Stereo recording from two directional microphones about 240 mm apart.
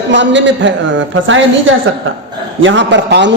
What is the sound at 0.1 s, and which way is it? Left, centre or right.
A man's voice, right.